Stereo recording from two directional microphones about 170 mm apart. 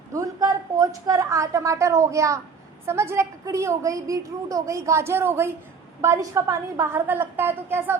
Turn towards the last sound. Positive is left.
turn(degrees=-15)  # may be behind; listen again after turning